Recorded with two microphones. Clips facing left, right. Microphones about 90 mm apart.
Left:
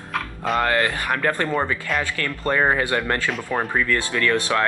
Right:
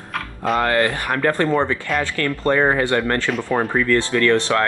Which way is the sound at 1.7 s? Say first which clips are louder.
Right 3 dB; 10° left (ahead or behind).